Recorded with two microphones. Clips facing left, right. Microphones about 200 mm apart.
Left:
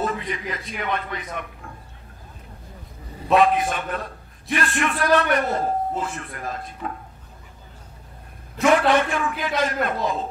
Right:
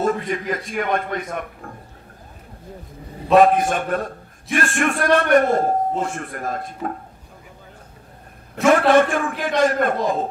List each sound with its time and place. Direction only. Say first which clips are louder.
0.0 s a man's voice: right 5 dB; 45° right (ahead or behind)
3.3 s a man's voice: right 4 dB; 45° right (ahead or behind)
8.6 s a man's voice: right 4 dB; 45° right (ahead or behind)